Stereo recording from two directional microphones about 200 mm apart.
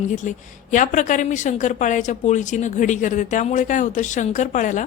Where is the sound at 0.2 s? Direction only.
40° left (ahead or behind).